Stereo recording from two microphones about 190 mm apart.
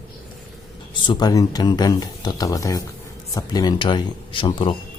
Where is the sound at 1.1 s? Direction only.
20° left (ahead or behind).